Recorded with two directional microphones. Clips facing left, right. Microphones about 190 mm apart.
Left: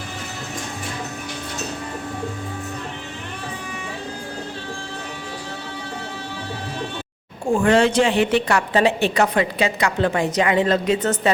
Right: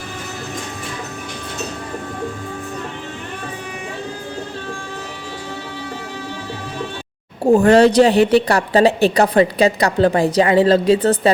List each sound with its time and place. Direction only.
7.5 s a woman's voice: 40° right (ahead or behind)